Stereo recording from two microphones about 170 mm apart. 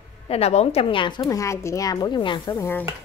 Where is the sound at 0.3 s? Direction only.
40° left (ahead or behind).